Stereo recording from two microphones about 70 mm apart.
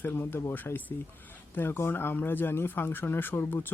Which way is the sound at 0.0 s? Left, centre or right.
Left.